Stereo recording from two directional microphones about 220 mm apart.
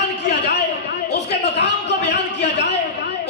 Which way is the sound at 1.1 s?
50° left (ahead or behind).